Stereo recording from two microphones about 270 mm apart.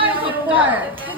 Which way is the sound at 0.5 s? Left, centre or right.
Centre.